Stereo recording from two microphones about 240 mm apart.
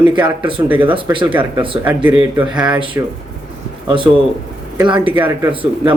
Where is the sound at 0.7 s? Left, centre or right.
Centre.